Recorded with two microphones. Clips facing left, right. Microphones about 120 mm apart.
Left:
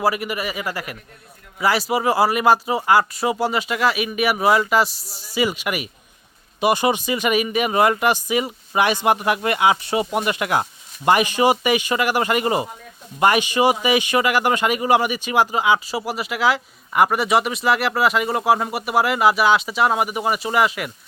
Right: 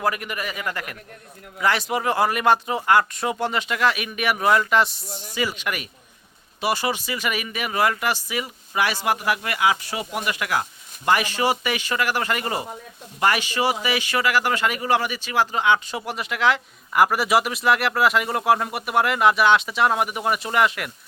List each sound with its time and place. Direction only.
0.0 s speech: 5° left (ahead or behind)